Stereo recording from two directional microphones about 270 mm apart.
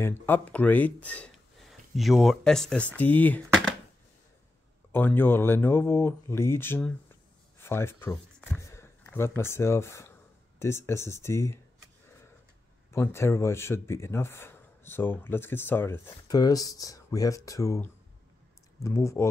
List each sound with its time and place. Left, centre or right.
0.0 s speech: centre
4.9 s speech: centre
12.9 s speech: centre